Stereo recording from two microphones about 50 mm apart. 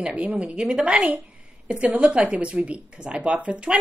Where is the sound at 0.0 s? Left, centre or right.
Right.